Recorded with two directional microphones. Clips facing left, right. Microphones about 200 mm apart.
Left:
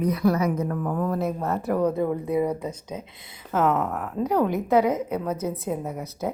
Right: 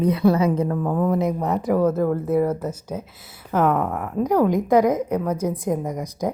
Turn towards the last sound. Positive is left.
turn(degrees=-15)  # may be behind; listen again after turning